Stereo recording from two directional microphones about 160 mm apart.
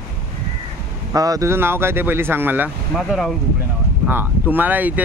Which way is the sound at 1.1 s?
20° right (ahead or behind).